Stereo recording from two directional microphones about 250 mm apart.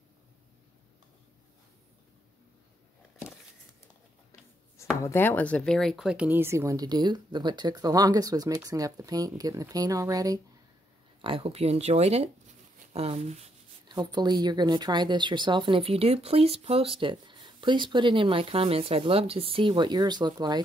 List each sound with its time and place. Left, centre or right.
5.0 s speech: centre